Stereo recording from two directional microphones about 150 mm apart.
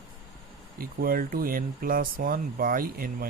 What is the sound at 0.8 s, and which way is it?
Speech, 75° right (ahead or behind).